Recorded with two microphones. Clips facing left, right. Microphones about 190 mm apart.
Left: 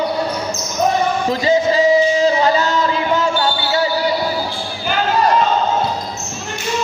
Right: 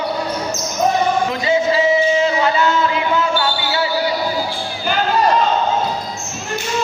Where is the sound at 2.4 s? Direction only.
35° left (ahead or behind).